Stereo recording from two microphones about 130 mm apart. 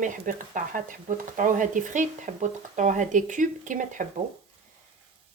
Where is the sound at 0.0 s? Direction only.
85° right.